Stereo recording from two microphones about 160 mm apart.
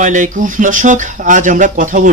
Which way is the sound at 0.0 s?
50° right (ahead or behind).